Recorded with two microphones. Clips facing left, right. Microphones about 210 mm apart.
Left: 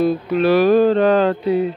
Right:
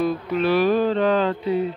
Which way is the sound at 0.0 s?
35° left (ahead or behind).